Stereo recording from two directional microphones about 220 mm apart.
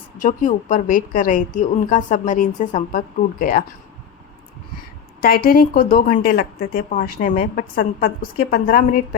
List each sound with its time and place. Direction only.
0.2 s a woman's voice: 35° left (ahead or behind)
5.2 s a woman's voice: 40° left (ahead or behind)